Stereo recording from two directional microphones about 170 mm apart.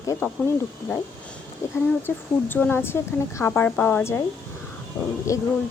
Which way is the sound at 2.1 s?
10° left (ahead or behind).